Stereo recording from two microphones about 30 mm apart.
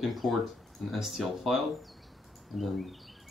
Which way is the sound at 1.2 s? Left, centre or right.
Centre.